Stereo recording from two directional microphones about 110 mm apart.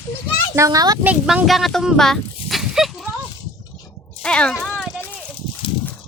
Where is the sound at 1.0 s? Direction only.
15° right (ahead or behind).